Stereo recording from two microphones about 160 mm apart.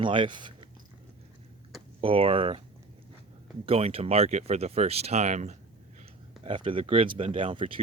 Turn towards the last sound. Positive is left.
turn(degrees=-35)  # may be behind; listen again after turning